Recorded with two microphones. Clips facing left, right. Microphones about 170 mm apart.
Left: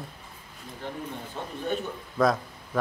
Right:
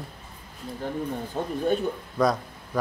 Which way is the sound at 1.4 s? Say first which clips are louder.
Right 8 dB; 40° right (ahead or behind).